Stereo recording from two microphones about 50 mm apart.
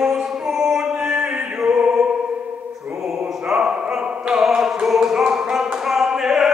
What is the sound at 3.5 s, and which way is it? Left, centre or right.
Opera, centre.